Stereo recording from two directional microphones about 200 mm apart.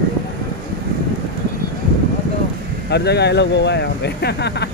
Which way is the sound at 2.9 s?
55° left (ahead or behind).